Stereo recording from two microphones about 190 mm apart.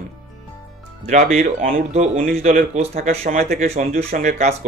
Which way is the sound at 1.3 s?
45° right (ahead or behind).